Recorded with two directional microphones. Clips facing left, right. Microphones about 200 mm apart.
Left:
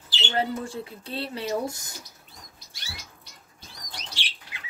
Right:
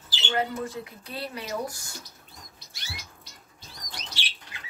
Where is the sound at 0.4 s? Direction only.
30° left (ahead or behind).